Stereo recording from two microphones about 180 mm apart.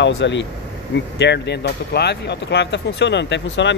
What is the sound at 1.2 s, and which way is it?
Speech, 70° left (ahead or behind).